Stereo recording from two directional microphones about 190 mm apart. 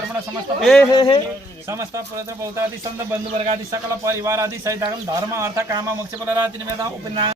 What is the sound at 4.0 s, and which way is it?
Speech, 15° right (ahead or behind).